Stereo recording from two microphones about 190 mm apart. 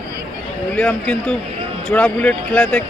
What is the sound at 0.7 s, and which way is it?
Speech, 10° left (ahead or behind).